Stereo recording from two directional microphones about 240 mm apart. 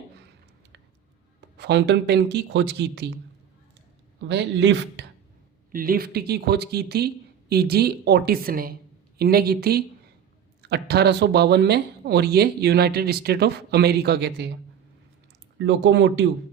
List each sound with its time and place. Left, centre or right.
1.5 s speech: right
4.2 s speech: right
15.5 s speech: right